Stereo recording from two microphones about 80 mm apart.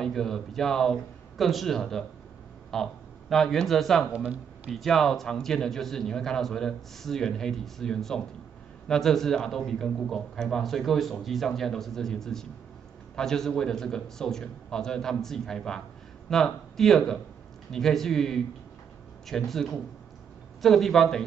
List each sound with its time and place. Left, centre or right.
0.0 s a man's voice: centre
4.1 s speech: centre
4.6 s a man's voice: centre